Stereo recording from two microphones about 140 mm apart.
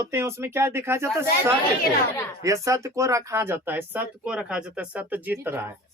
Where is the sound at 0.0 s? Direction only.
20° right (ahead or behind).